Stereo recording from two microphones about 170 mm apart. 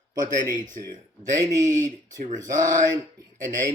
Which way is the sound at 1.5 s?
45° right (ahead or behind).